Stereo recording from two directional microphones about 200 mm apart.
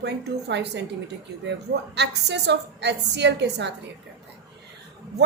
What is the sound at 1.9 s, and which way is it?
A woman's voice, 60° right (ahead or behind).